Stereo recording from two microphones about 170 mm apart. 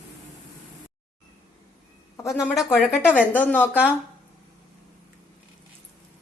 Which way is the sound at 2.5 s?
Centre (ahead or behind).